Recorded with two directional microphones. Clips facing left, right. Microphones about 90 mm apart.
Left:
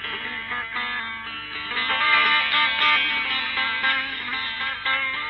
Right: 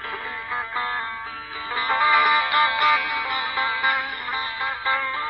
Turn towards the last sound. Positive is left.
turn(degrees=-15)  # may be behind; listen again after turning